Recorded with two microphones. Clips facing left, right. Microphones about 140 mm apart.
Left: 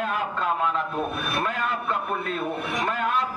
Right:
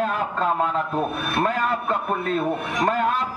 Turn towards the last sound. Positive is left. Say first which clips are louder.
# right 4 dB
turn(degrees=-35)  # may be behind; listen again after turning